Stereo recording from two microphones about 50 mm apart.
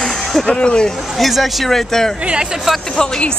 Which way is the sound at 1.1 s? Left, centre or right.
Centre.